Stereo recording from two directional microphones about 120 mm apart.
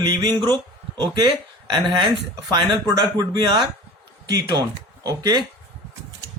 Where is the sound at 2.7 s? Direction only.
35° right (ahead or behind).